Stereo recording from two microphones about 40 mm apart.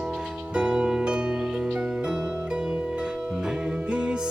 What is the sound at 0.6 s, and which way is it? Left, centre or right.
Music, right.